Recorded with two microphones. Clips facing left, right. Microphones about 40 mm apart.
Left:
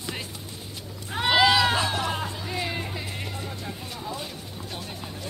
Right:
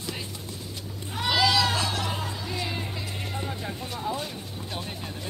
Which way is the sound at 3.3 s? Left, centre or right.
Centre.